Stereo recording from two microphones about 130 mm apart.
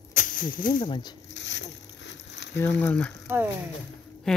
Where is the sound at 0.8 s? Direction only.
35° left (ahead or behind).